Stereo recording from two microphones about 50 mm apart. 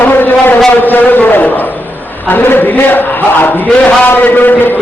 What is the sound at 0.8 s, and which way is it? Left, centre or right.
A man's voice, left.